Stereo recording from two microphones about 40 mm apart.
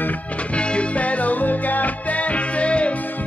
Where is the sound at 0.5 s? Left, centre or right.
Left.